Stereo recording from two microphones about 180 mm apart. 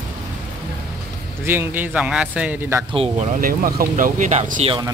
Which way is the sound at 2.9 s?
35° right (ahead or behind).